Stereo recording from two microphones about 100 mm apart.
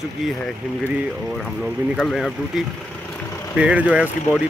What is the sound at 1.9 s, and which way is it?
Speech, 5° left (ahead or behind).